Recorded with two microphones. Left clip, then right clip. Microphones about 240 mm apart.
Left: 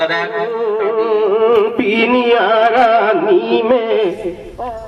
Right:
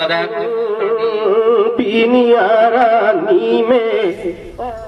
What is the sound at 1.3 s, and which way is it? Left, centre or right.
Music, right.